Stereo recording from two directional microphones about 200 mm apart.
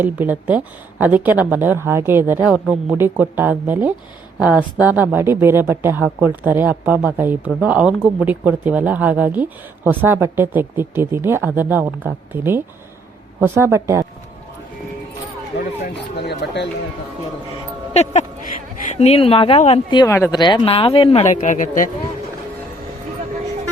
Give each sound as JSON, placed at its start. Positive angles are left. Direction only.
{"t": 0.0, "sound": "speech", "side_deg": -10}
{"t": 15.8, "sound": "speech", "side_deg": 55}
{"t": 17.9, "sound": "speech", "side_deg": 35}
{"t": 20.4, "sound": "speech", "side_deg": 25}